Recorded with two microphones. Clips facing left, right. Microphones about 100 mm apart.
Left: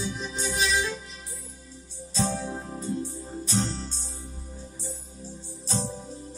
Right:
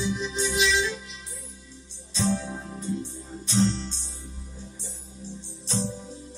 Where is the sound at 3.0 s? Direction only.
40° left (ahead or behind).